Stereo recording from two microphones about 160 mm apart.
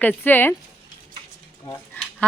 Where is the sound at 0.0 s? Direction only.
10° left (ahead or behind).